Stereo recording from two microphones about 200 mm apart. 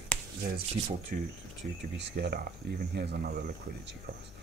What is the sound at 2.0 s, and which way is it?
Speech, 55° right (ahead or behind).